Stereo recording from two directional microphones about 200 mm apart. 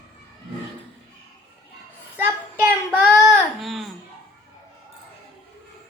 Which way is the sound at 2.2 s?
10° right (ahead or behind).